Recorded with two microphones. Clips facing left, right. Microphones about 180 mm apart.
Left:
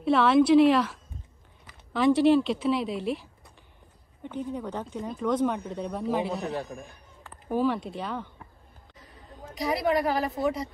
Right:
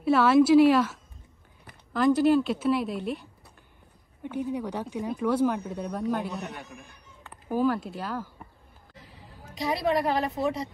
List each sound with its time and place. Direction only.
0.0 s a man's voice: 5° right (ahead or behind)
2.0 s a man's voice: centre (ahead or behind)
6.6 s a man's voice: 35° left (ahead or behind)
7.2 s speech: centre (ahead or behind)
10.0 s a man's voice: centre (ahead or behind)